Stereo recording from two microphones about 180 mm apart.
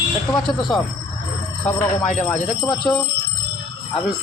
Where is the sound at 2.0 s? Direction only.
40° left (ahead or behind).